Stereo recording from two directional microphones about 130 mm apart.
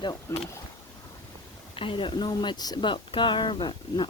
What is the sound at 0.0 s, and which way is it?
Speech, 25° left (ahead or behind).